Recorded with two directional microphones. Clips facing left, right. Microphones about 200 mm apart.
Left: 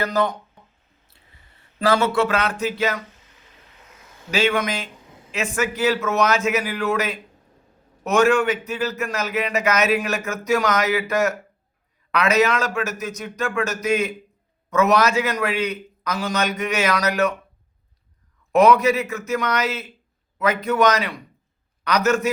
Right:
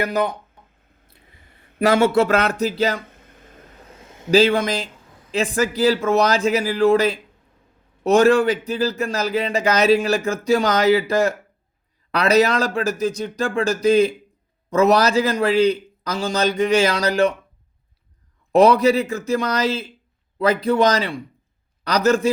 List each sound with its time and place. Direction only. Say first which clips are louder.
1.8 s speech: right 3 dB; 25° right (ahead or behind)
2.1 s a man's voice: right 4 dB; 40° right (ahead or behind)
3.1 s a sound: right 6 dB; 55° right (ahead or behind); by 4.9 s 30° right (ahead or behind)
5.3 s a man's voice: right 4 dB; 35° right (ahead or behind)
18.5 s a man's voice: right 2 dB; 35° right (ahead or behind)